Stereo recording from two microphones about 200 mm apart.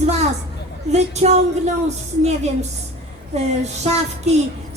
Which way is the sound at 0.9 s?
35° right (ahead or behind).